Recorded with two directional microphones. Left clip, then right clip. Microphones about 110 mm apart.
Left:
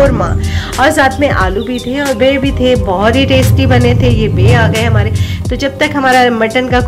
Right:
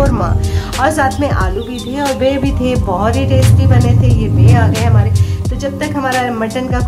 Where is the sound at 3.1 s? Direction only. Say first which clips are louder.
Left 5 dB; 35° left (ahead or behind).